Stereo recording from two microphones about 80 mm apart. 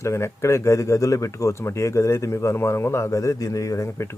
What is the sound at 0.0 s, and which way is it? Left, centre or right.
Speech, left.